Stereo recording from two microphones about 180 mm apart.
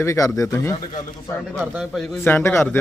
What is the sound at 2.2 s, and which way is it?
Speech, 15° left (ahead or behind).